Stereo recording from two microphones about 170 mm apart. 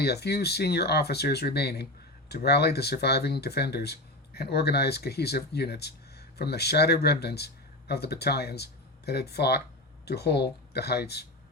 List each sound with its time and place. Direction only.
0.0 s speech: 70° left (ahead or behind)